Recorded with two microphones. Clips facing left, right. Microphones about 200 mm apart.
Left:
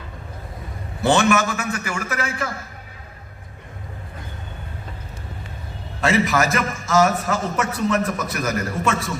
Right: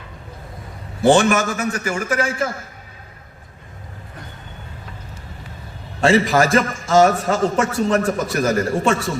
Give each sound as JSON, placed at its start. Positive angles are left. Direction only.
{"t": 1.2, "sound": "a man's voice", "side_deg": -30}
{"t": 1.5, "sound": "a man's voice", "side_deg": -50}
{"t": 6.0, "sound": "a man's voice", "side_deg": -30}